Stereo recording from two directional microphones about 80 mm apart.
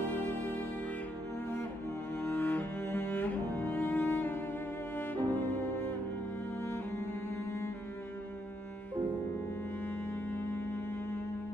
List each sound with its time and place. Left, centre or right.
0.1 s music: left
2.1 s cello: left
4.9 s music: left
6.6 s cello: left
9.8 s music: left